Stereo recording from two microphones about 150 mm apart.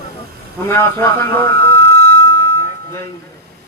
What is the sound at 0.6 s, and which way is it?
Speech, 15° left (ahead or behind).